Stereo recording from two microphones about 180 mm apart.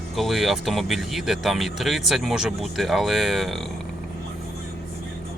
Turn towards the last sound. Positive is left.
turn(degrees=0)  # may be behind; listen again after turning